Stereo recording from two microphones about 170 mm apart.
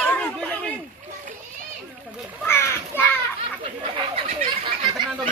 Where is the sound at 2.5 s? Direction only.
15° left (ahead or behind).